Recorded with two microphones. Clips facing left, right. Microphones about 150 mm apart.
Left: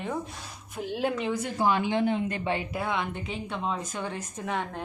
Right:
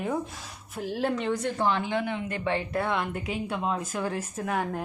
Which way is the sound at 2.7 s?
Centre (ahead or behind).